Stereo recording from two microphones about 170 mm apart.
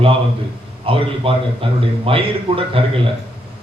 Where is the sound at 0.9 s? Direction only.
30° right (ahead or behind).